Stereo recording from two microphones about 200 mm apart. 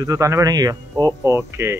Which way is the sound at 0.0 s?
15° right (ahead or behind).